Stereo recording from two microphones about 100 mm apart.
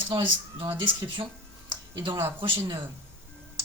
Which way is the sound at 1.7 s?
55° right (ahead or behind).